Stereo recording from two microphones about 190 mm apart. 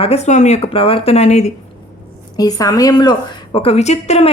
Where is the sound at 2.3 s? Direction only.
20° left (ahead or behind).